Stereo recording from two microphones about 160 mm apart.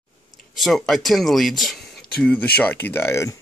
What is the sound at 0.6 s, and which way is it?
Speech, centre (ahead or behind).